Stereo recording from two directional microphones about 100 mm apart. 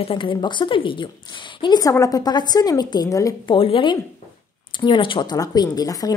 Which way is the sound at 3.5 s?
60° left (ahead or behind).